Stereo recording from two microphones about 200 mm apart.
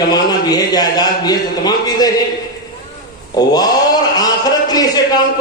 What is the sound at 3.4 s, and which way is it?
Speech, 20° left (ahead or behind).